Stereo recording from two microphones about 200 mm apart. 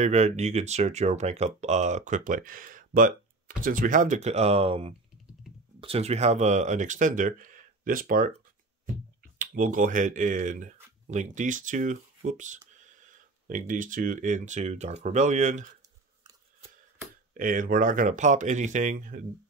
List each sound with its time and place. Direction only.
0.0 s speech: 35° right (ahead or behind)
9.4 s speech: 45° right (ahead or behind)
17.3 s speech: 40° right (ahead or behind)